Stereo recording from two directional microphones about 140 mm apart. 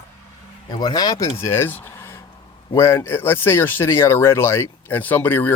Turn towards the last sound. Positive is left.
turn(degrees=15)  # may be behind; listen again after turning